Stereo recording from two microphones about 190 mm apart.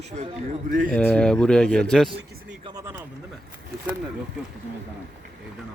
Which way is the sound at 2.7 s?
20° right (ahead or behind).